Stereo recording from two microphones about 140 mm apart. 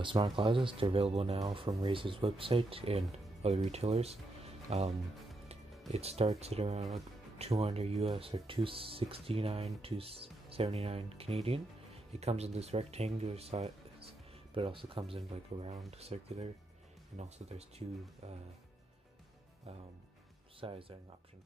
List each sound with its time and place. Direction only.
0.0 s speech: 35° right (ahead or behind)
20.6 s speech: 40° right (ahead or behind)